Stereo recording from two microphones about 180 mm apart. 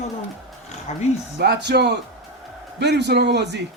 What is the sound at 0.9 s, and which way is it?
Speech, 35° left (ahead or behind).